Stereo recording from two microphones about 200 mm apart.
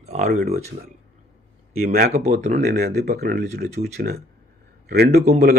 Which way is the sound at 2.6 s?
50° right (ahead or behind).